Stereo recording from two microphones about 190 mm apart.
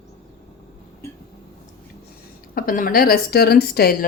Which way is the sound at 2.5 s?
50° left (ahead or behind).